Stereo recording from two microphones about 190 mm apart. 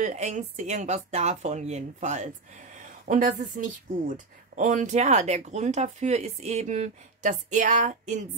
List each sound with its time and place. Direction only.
0.0 s speech: 40° right (ahead or behind)